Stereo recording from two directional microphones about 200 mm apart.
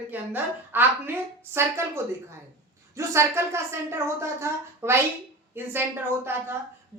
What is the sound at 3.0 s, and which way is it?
A woman's voice, 15° right (ahead or behind).